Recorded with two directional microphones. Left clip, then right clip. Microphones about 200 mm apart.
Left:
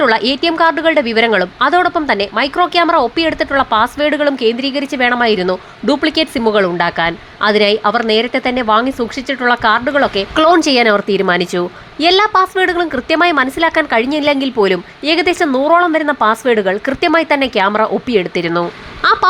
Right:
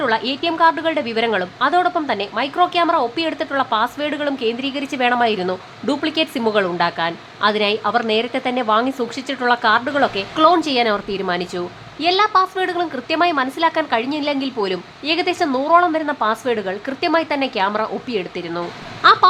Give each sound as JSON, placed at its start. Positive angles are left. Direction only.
{"t": 0.0, "sound": "a woman's voice", "side_deg": 20}
{"t": 10.3, "sound": "a woman's voice", "side_deg": 25}